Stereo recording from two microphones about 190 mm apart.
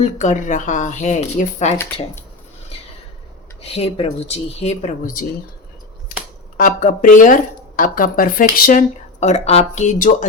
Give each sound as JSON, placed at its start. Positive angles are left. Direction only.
{"t": 0.0, "sound": "speech", "side_deg": 40}
{"t": 3.6, "sound": "speech", "side_deg": 30}
{"t": 6.6, "sound": "speech", "side_deg": 45}
{"t": 9.2, "sound": "speech", "side_deg": 35}